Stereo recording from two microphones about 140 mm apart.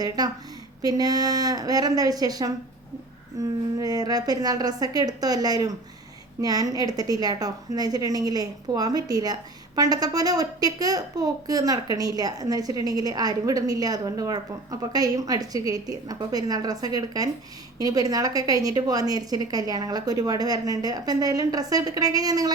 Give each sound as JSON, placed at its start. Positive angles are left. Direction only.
{"t": 0.2, "sound": "a woman's voice", "side_deg": -30}